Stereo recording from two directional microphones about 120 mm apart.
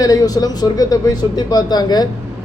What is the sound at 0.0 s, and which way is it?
A man's voice, 30° left (ahead or behind).